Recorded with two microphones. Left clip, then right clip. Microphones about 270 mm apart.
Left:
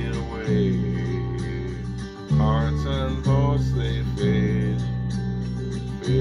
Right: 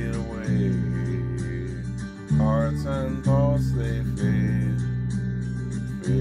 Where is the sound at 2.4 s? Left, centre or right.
Right.